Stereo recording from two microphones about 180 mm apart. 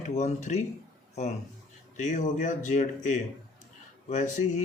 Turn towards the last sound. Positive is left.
turn(degrees=45)  # may be behind; listen again after turning